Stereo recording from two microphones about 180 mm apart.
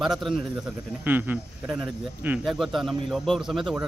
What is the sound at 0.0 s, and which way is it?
Speech, centre (ahead or behind).